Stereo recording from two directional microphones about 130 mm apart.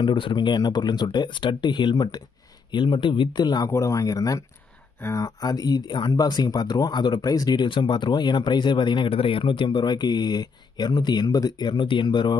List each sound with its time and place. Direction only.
0.0 s speech: 40° left (ahead or behind)